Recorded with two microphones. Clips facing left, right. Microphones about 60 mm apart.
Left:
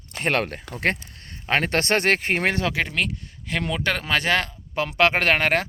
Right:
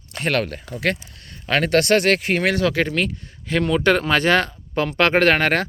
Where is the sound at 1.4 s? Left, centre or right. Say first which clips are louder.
Right 4 dB; left.